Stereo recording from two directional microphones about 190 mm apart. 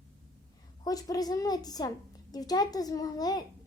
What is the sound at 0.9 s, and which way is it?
Speech, 20° left (ahead or behind).